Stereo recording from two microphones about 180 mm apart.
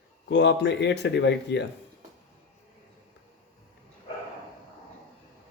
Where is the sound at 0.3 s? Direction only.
70° left (ahead or behind).